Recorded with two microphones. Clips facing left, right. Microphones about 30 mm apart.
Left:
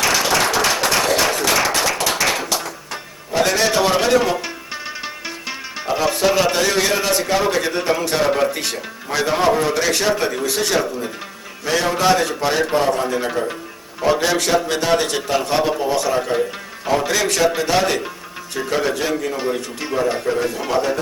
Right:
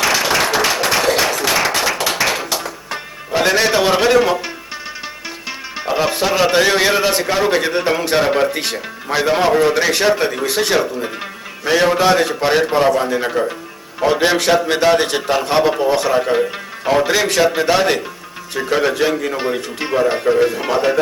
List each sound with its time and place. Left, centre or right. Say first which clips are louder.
0.0 s applause: right 2 dB; centre
1.4 s music: right 1 dB; centre
4.7 s music: even; centre
5.7 s music: right 2 dB; centre
6.2 s a man's voice: even; centre
6.5 s a man's voice: right 4 dB; right